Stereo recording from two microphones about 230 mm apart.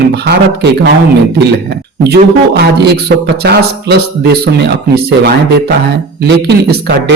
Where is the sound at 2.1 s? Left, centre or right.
Right.